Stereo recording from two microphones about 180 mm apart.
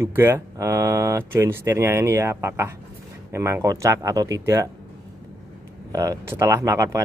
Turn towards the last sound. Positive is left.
turn(degrees=-15)  # may be behind; listen again after turning